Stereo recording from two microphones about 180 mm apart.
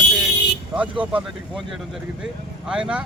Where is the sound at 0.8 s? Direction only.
10° right (ahead or behind).